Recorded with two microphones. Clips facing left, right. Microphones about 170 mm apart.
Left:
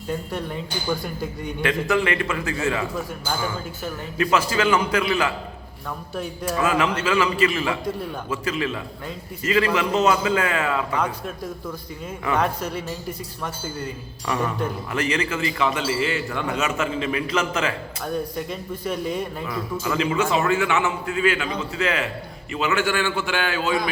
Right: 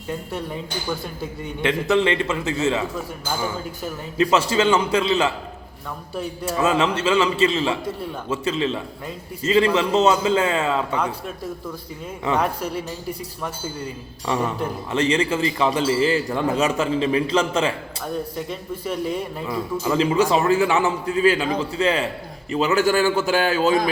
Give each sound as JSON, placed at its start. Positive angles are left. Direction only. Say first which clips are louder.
{"t": 0.3, "sound": "speech", "louder": "even", "side_deg": 0}
{"t": 1.6, "sound": "a man's voice", "louder": "right 3 dB", "side_deg": -25}
{"t": 4.2, "sound": "a man's voice", "louder": "right 3 dB", "side_deg": -25}
{"t": 6.6, "sound": "a man's voice", "louder": "right 2 dB", "side_deg": -25}
{"t": 14.3, "sound": "a man's voice", "louder": "right 1 dB", "side_deg": -25}
{"t": 18.0, "sound": "speech", "louder": "even", "side_deg": 0}
{"t": 19.8, "sound": "a man's voice", "louder": "right 4 dB", "side_deg": -30}